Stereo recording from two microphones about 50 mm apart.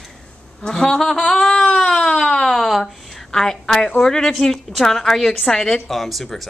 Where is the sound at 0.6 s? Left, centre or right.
Centre.